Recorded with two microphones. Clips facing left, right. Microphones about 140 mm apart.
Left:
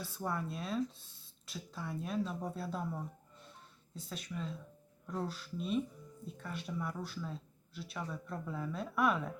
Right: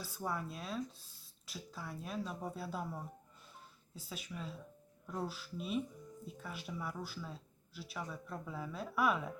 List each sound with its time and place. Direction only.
0.0 s speech: centre (ahead or behind)